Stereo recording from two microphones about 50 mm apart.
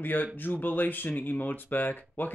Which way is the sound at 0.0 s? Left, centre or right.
Left.